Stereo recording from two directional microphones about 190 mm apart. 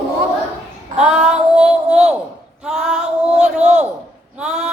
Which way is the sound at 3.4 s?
35° right (ahead or behind).